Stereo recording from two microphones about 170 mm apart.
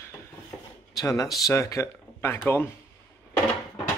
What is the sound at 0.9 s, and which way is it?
Speech, 20° left (ahead or behind).